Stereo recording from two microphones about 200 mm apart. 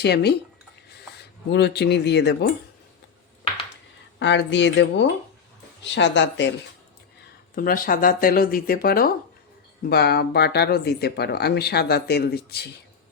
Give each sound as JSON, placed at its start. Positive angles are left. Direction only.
{"t": 0.0, "sound": "speech", "side_deg": 55}
{"t": 4.2, "sound": "speech", "side_deg": 65}
{"t": 7.5, "sound": "speech", "side_deg": 45}